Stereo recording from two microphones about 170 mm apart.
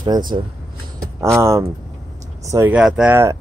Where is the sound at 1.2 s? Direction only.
15° right (ahead or behind).